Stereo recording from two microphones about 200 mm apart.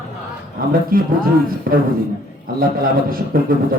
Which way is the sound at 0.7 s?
45° right (ahead or behind).